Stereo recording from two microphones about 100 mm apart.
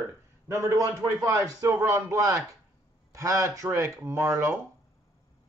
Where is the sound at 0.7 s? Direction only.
30° right (ahead or behind).